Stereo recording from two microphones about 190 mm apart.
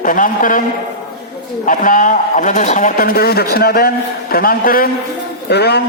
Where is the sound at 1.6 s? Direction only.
45° left (ahead or behind).